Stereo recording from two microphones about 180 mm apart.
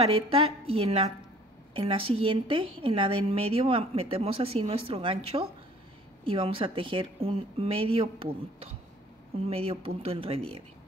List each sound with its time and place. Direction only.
0.0 s a woman's voice: 30° right (ahead or behind)